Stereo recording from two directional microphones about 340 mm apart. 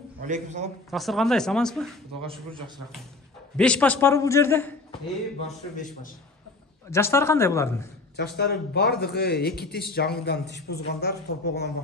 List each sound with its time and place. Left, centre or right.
0.2 s a man's voice: right
0.8 s a man's voice: centre
3.5 s a man's voice: centre
6.9 s speech: centre
8.2 s a man's voice: left